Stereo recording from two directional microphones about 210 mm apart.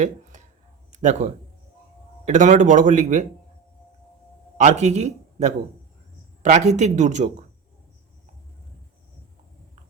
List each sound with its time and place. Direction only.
0.0 s a sound: 35° right (ahead or behind)
0.9 s a man's voice: 35° right (ahead or behind)
4.5 s a man's voice: 35° right (ahead or behind)